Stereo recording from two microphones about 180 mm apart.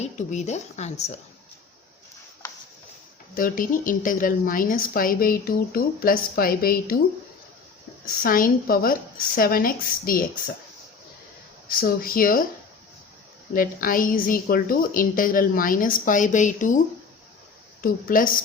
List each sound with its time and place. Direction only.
0.0 s a woman's voice: 40° left (ahead or behind)
3.3 s a woman's voice: 50° left (ahead or behind)
8.2 s a woman's voice: 50° left (ahead or behind)
11.7 s a woman's voice: 55° left (ahead or behind)
13.5 s a woman's voice: 50° left (ahead or behind)
17.8 s a woman's voice: 50° left (ahead or behind)